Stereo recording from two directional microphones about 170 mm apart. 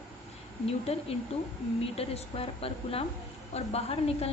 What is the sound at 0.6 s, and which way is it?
A woman's voice, 35° left (ahead or behind).